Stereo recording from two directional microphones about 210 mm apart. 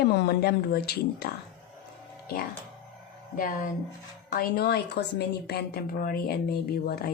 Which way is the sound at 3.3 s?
40° left (ahead or behind).